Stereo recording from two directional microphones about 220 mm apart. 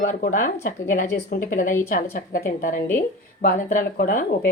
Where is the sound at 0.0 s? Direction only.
35° left (ahead or behind).